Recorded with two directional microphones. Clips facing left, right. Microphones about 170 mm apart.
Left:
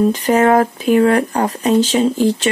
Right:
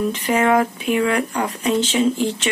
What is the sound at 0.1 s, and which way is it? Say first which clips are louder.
Speech: left 5 dB; 40° left (ahead or behind).